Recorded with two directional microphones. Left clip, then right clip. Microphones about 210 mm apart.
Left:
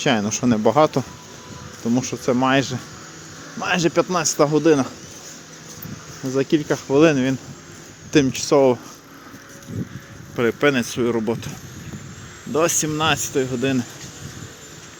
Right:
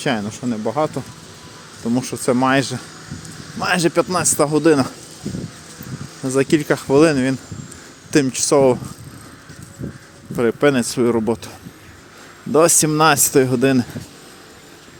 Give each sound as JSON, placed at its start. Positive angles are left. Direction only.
{"t": 0.0, "sound": "speech", "side_deg": 5}
{"t": 0.3, "sound": "speech", "side_deg": 15}
{"t": 1.8, "sound": "a man's voice", "side_deg": 0}
{"t": 6.3, "sound": "a man's voice", "side_deg": -10}
{"t": 7.0, "sound": "speech", "side_deg": -5}
{"t": 10.3, "sound": "speech", "side_deg": -15}
{"t": 12.5, "sound": "speech", "side_deg": -25}